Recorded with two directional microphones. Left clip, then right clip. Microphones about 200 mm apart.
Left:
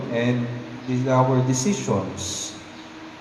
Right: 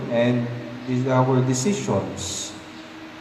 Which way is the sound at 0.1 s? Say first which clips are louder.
Right 3 dB; 60° right (ahead or behind).